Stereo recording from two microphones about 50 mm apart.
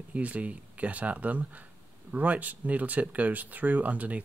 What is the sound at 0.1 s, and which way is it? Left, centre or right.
Speech, right.